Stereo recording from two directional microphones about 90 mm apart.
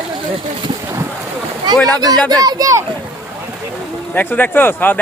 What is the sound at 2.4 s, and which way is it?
Speech, 40° right (ahead or behind).